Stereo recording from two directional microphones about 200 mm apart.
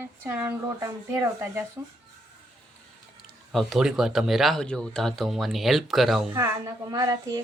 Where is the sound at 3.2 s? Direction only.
Centre (ahead or behind).